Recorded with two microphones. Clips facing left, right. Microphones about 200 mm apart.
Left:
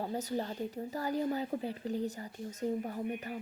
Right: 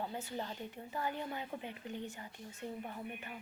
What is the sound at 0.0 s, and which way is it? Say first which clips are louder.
A woman's voice: left 6 dB; 40° left (ahead or behind).